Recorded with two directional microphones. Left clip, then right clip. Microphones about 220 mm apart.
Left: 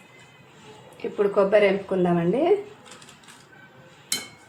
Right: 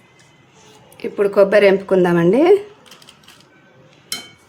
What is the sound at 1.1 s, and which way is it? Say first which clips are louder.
Speech: right 6 dB; 45° right (ahead or behind).